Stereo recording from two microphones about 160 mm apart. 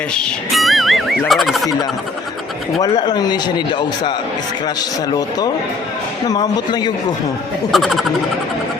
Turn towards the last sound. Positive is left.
turn(degrees=0)  # may be behind; listen again after turning